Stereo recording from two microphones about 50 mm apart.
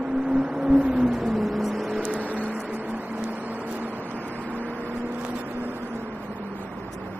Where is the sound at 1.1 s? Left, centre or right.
Centre.